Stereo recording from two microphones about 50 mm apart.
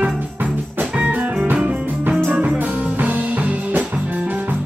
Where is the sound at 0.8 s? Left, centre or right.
Right.